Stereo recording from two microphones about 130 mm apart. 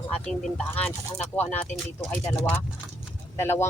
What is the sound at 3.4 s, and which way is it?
Speech, 20° left (ahead or behind).